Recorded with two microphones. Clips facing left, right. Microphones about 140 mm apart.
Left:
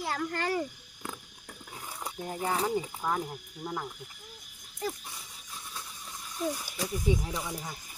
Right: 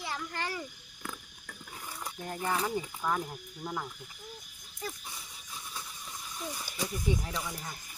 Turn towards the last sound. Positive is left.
turn(degrees=10)  # may be behind; listen again after turning